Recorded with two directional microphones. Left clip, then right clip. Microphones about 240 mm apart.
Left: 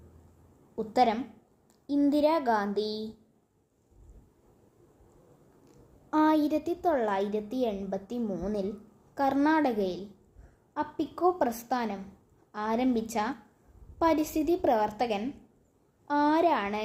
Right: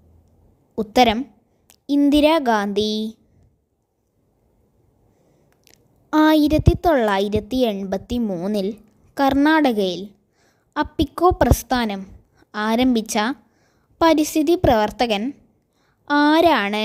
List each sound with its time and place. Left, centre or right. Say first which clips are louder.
0.8 s a woman's voice: right 9 dB; right
2.7 s a woman's voice: right 10 dB; right
5.6 s a woman's voice: right 12 dB; right